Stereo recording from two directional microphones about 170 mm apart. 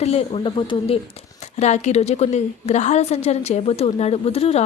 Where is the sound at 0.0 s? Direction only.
35° left (ahead or behind).